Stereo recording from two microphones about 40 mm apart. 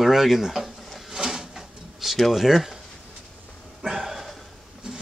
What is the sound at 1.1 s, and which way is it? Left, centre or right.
Drawer open or close, centre.